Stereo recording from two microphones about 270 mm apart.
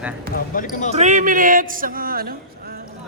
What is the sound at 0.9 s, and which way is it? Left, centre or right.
Speech, right.